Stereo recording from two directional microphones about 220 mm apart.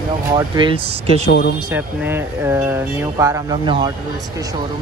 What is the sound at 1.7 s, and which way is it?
Speech, 10° right (ahead or behind).